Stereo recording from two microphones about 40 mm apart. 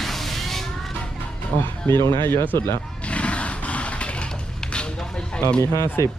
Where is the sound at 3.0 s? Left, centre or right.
Left.